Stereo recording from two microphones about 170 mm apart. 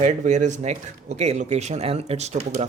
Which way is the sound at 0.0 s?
45° right (ahead or behind).